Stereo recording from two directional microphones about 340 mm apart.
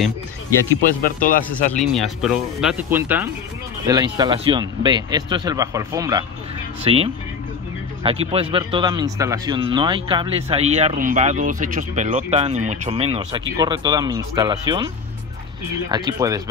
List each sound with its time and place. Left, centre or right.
1.0 s speech: left
1.7 s speech: centre
15.9 s speech: centre